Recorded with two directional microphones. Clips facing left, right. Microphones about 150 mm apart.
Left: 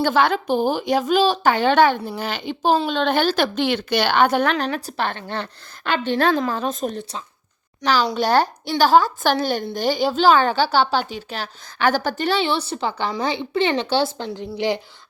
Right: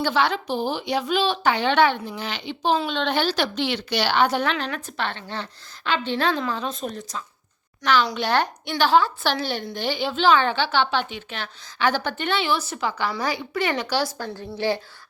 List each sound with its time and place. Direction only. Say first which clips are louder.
0.0 s a woman's voice: left 4 dB; 50° left (ahead or behind); by 14.8 s 20° left (ahead or behind)